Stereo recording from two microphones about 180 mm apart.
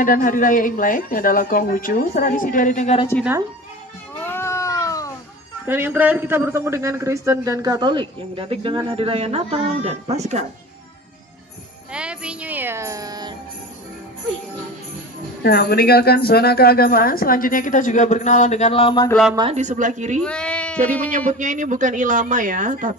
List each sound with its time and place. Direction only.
0.0 s speech: 50° left (ahead or behind)
4.2 s cat: 15° left (ahead or behind)
5.7 s a man's voice: 10° right (ahead or behind); by 10.4 s 40° right (ahead or behind)
11.9 s speech: 5° right (ahead or behind); by 13.4 s 20° right (ahead or behind)
15.4 s speech: 60° left (ahead or behind); by 19.0 s 30° left (ahead or behind)
19.5 s speech: 45° right (ahead or behind)
20.2 s speech: 5° left (ahead or behind)
21.3 s speech: 45° right (ahead or behind)